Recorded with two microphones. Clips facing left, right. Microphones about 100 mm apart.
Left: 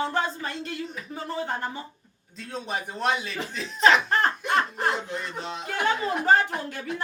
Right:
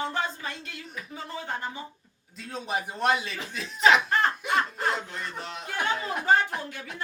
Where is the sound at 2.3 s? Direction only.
5° right (ahead or behind).